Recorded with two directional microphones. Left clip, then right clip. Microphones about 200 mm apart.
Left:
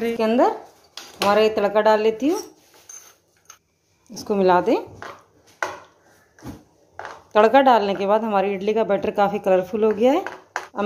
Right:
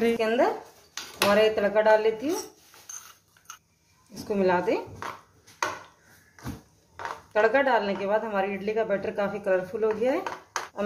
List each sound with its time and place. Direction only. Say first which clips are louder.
0.2 s a woman's voice: left 5 dB; 35° left (ahead or behind)
2.9 s a sound: even; 5° right (ahead or behind)
4.1 s a woman's voice: left 7 dB; 30° left (ahead or behind)
7.3 s a woman's voice: left 8 dB; 35° left (ahead or behind)